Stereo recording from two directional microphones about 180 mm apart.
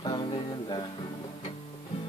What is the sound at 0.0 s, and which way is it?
Music, 25° left (ahead or behind).